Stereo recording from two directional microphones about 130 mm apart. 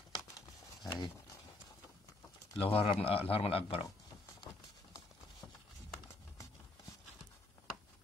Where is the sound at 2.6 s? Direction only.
50° left (ahead or behind).